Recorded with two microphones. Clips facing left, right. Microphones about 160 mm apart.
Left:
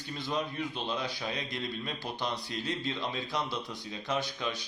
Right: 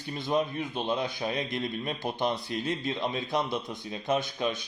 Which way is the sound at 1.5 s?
20° right (ahead or behind).